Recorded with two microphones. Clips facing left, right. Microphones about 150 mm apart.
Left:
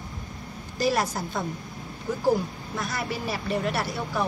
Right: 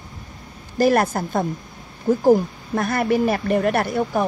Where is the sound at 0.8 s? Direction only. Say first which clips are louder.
Right 8 dB; 55° right (ahead or behind).